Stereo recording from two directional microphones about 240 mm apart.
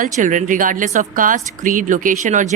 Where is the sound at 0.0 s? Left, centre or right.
Right.